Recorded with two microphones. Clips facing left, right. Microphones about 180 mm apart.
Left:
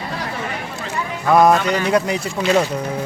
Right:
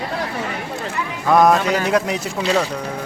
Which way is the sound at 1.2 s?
Centre (ahead or behind).